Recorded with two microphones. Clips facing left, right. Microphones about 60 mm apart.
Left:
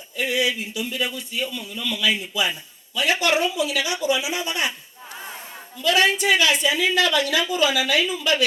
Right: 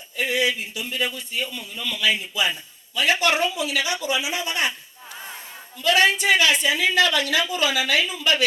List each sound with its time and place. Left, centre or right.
0.2 s speech: right
5.8 s a woman's voice: right